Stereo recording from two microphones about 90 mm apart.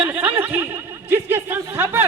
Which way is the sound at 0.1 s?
15° right (ahead or behind).